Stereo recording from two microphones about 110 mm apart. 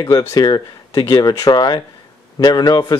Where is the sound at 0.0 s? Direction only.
30° left (ahead or behind).